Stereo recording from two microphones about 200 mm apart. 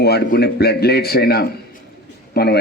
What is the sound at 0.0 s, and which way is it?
A man's voice, 55° left (ahead or behind).